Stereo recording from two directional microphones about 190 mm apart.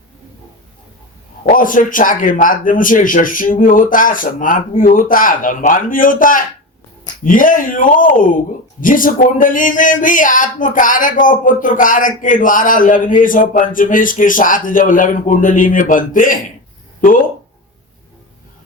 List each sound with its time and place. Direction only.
1.5 s speech: 45° left (ahead or behind)